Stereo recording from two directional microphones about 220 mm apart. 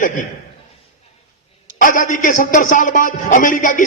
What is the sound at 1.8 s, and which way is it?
A man's voice, 35° left (ahead or behind).